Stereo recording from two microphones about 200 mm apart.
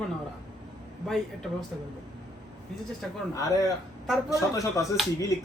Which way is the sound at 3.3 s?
15° left (ahead or behind).